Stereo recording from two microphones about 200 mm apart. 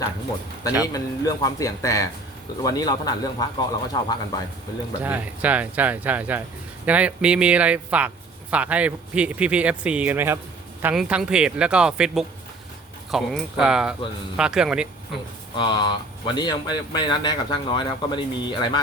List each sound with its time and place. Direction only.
0.9 s speech: 20° left (ahead or behind)
5.0 s speech: 10° right (ahead or behind)
15.5 s speech: 20° left (ahead or behind)